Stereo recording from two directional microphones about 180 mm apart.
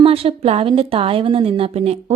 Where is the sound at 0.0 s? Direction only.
30° right (ahead or behind).